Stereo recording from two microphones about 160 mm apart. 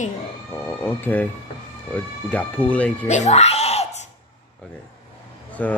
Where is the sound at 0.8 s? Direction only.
10° left (ahead or behind).